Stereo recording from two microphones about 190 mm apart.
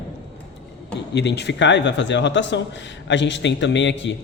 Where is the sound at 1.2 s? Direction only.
65° left (ahead or behind).